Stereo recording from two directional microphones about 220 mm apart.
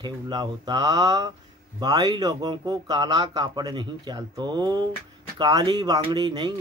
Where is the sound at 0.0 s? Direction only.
20° right (ahead or behind).